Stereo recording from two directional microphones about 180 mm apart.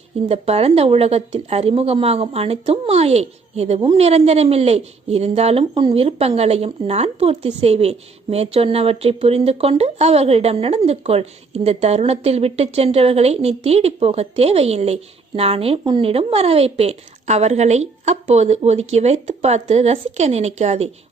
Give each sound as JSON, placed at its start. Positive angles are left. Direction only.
{"t": 0.3, "sound": "a woman's voice", "side_deg": -35}